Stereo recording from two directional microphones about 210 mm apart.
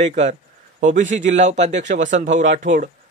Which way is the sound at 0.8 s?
35° right (ahead or behind).